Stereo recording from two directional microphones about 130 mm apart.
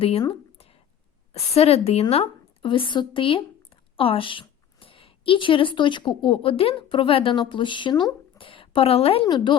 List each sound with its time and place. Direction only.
0.3 s a sound: 50° left (ahead or behind)
1.3 s a woman's voice: 50° left (ahead or behind)
9.2 s a woman's voice: 35° left (ahead or behind)